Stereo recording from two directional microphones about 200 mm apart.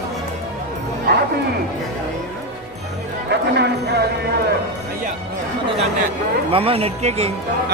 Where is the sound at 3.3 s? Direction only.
55° right (ahead or behind).